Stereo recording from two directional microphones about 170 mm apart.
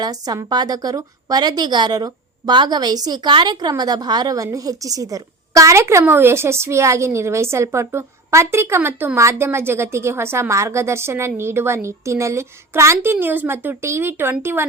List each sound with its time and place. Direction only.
0.0 s a woman's voice: 20° right (ahead or behind)